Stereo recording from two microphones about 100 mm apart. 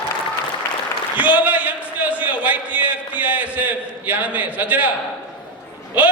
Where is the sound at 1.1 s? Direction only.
15° right (ahead or behind).